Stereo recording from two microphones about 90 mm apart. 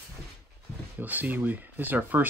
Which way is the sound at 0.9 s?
20° right (ahead or behind).